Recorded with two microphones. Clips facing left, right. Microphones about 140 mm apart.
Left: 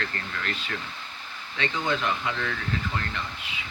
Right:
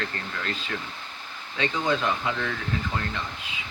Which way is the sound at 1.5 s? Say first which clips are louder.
Right 2 dB; 15° right (ahead or behind).